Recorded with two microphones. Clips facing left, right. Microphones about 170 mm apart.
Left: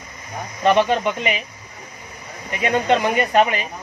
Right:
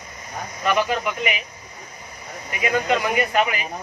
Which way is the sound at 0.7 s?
25° left (ahead or behind).